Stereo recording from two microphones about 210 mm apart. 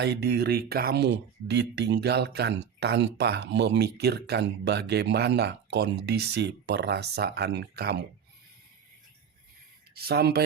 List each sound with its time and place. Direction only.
0.0 s speech: 50° right (ahead or behind)
9.9 s speech: 50° right (ahead or behind)